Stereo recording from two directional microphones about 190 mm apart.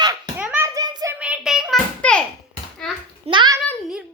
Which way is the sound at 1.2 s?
5° right (ahead or behind).